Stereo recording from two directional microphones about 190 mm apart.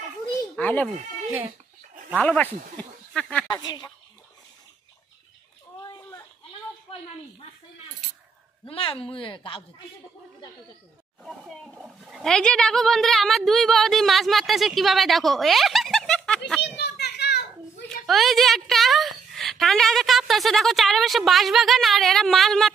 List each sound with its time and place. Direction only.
0.6 s speech: 10° left (ahead or behind)
2.2 s speech: 5° left (ahead or behind)
3.4 s a woman's voice: 20° left (ahead or behind)
8.6 s a woman's voice: 30° left (ahead or behind)
11.2 s a child's voice: centre (ahead or behind)
16.7 s children playing: 60° left (ahead or behind)
17.8 s a woman's voice: centre (ahead or behind)